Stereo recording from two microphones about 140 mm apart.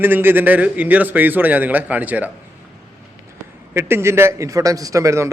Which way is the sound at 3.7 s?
15° right (ahead or behind).